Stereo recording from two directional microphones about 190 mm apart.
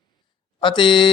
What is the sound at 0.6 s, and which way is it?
Speech, 25° left (ahead or behind).